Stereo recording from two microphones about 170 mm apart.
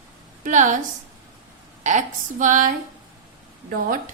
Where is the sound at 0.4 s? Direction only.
45° right (ahead or behind).